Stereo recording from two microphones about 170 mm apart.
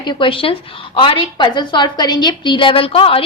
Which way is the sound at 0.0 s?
30° left (ahead or behind).